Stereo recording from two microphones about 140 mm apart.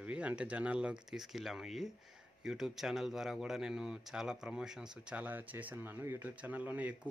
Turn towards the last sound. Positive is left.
turn(degrees=-10)  # may be behind; listen again after turning